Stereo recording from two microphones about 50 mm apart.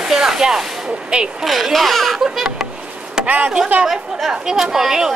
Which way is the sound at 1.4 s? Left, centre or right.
Centre.